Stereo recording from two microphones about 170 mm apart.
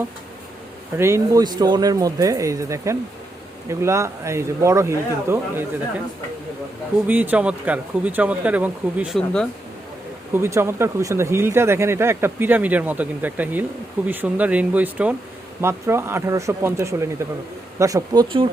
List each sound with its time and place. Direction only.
0.9 s speech: 15° right (ahead or behind)
7.1 s speech: 10° right (ahead or behind)
9.1 s speech: 5° left (ahead or behind)
10.3 s speech: 15° right (ahead or behind)